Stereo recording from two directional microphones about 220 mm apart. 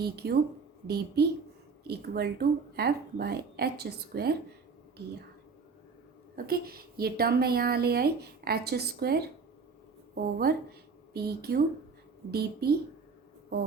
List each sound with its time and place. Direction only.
0.0 s a woman's voice: 45° right (ahead or behind)
6.3 s a woman's voice: 45° right (ahead or behind)
10.3 s a woman's voice: 45° right (ahead or behind)